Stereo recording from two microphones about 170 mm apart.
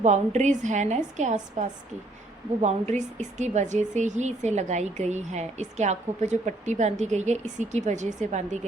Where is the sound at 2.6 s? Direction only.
40° right (ahead or behind).